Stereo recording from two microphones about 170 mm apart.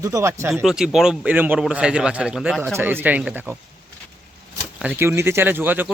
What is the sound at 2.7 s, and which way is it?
Speech, 10° right (ahead or behind).